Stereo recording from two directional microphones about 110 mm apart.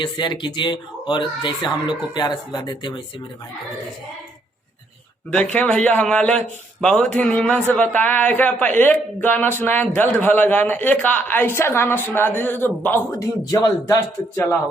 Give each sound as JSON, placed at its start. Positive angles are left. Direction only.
{"t": 0.0, "sound": "speech", "side_deg": 45}
{"t": 5.3, "sound": "a man's voice", "side_deg": 10}
{"t": 13.5, "sound": "speech", "side_deg": 30}